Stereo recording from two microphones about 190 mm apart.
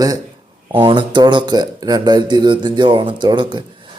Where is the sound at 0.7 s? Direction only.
25° right (ahead or behind).